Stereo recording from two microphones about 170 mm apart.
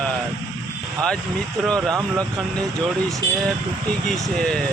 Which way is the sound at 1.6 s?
5° left (ahead or behind).